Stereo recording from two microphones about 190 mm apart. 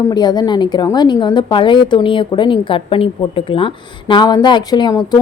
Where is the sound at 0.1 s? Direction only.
20° left (ahead or behind).